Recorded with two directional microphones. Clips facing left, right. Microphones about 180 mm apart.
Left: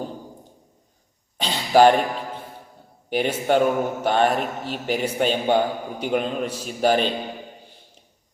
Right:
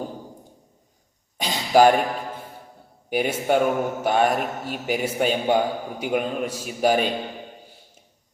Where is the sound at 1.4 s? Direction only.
10° right (ahead or behind).